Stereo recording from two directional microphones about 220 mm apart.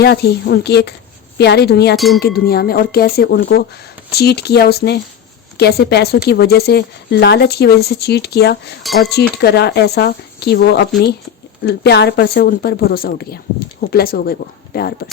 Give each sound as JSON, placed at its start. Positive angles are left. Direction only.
{"t": 0.0, "sound": "speech", "side_deg": 50}